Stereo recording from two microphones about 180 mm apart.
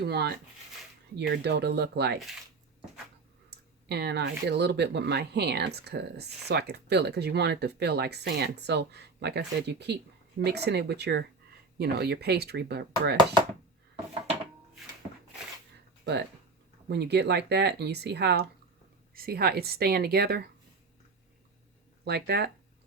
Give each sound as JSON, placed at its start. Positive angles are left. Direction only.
{"t": 0.0, "sound": "speech", "side_deg": -65}
{"t": 3.5, "sound": "speech", "side_deg": -65}
{"t": 16.9, "sound": "speech", "side_deg": -70}
{"t": 19.1, "sound": "speech", "side_deg": -55}
{"t": 22.0, "sound": "speech", "side_deg": -65}